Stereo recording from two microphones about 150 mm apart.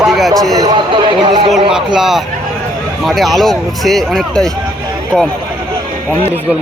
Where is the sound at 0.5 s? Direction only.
25° right (ahead or behind).